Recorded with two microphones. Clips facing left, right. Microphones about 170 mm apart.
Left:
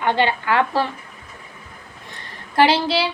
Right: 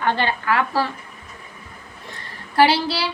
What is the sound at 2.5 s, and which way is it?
Speech, 20° left (ahead or behind).